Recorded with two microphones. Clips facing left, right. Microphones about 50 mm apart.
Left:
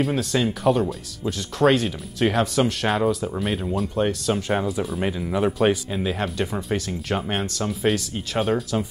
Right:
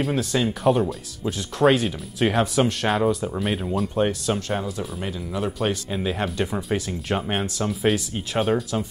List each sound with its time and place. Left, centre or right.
0.0 s speech: centre
4.4 s speech: centre
5.9 s speech: centre